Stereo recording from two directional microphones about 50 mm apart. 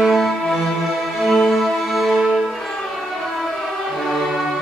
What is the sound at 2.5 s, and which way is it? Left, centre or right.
Music, centre.